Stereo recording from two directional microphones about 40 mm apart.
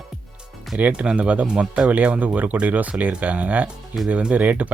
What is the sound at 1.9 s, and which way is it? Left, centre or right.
Speech, right.